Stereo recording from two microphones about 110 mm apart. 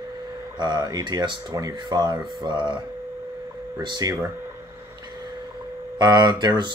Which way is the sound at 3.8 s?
40° right (ahead or behind).